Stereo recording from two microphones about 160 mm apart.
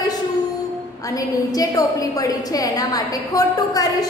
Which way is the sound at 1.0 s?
20° left (ahead or behind).